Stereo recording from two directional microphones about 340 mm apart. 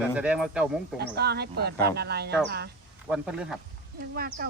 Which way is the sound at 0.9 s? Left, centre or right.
Right.